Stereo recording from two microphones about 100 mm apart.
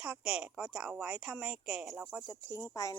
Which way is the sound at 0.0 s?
5° right (ahead or behind).